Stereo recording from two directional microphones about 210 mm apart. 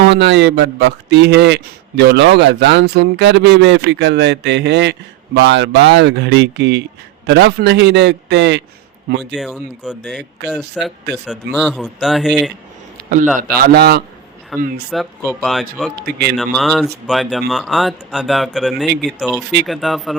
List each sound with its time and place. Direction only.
0.0 s speech: 55° right (ahead or behind)
9.3 s speech: centre (ahead or behind)
13.7 s a man's voice: 50° right (ahead or behind)
14.5 s speech: centre (ahead or behind)
16.0 s a man's voice: 50° right (ahead or behind)
16.4 s speech: centre (ahead or behind)